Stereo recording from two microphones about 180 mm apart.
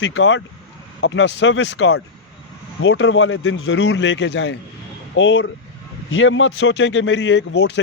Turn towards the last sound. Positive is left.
turn(degrees=75)  # may be behind; listen again after turning